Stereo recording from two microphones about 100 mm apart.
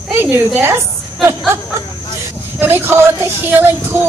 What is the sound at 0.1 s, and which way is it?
Speech, 20° right (ahead or behind).